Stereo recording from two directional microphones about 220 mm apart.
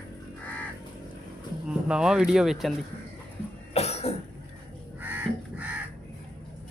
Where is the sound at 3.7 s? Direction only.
30° left (ahead or behind).